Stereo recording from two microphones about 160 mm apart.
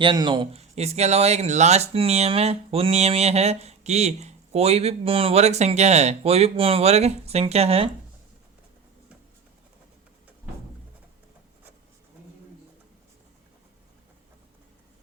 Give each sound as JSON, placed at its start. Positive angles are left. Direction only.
{"t": 0.0, "sound": "speech", "side_deg": -30}